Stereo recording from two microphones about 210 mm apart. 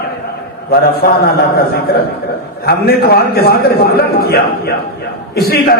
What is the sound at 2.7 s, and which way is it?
A man's voice, 45° left (ahead or behind).